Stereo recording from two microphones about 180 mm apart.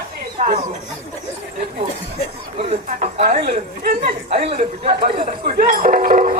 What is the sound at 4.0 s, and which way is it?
Speech, 30° right (ahead or behind).